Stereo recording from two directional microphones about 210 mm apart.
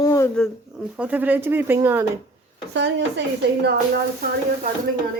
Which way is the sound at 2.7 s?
55° right (ahead or behind).